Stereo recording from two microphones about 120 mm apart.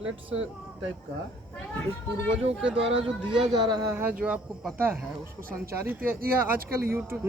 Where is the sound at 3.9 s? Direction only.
15° right (ahead or behind).